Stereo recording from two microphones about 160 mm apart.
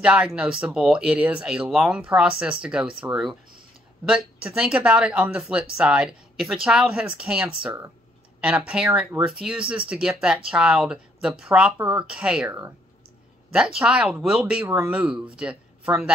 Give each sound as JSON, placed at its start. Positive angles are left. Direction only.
{"t": 0.0, "sound": "speech", "side_deg": -5}
{"t": 4.1, "sound": "speech", "side_deg": -5}
{"t": 13.7, "sound": "speech", "side_deg": -5}